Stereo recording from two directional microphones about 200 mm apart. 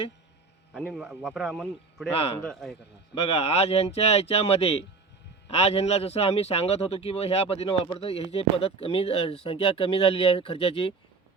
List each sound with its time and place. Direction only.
0.7 s a man's voice: centre (ahead or behind)
2.1 s speech: 30° left (ahead or behind)
2.4 s a man's voice: centre (ahead or behind)
3.2 s speech: 30° left (ahead or behind)